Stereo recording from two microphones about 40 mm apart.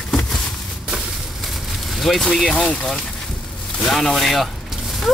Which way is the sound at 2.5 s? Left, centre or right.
Left.